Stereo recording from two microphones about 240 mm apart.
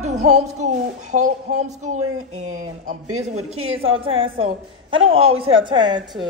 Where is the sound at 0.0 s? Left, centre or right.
Right.